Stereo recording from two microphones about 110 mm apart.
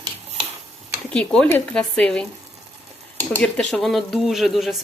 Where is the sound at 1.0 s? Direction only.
10° left (ahead or behind).